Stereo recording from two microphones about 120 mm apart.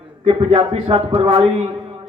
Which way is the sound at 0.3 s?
50° right (ahead or behind).